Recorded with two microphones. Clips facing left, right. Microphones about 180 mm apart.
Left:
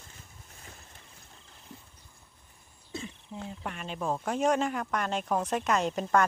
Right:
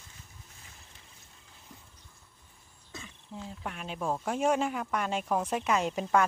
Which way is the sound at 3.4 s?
Centre (ahead or behind).